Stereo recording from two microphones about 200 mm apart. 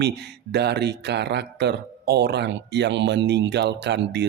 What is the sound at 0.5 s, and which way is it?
Speech, 55° right (ahead or behind).